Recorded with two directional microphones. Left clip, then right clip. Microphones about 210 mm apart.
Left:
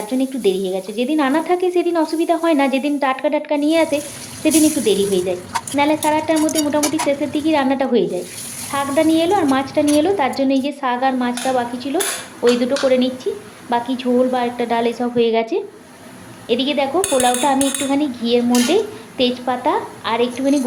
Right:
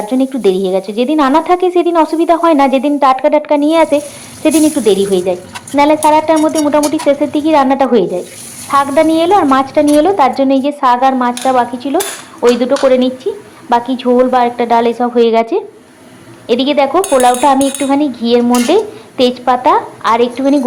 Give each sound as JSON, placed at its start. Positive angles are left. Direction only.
{"t": 0.1, "sound": "speech", "side_deg": -15}